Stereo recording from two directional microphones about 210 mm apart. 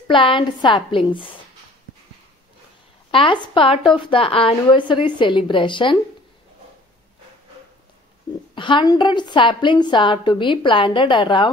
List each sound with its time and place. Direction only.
0.1 s a woman's voice: 25° left (ahead or behind)
3.1 s a woman's voice: 25° left (ahead or behind)
8.5 s a woman's voice: 25° left (ahead or behind)